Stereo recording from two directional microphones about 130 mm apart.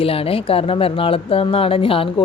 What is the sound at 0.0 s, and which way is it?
Speech, 45° left (ahead or behind).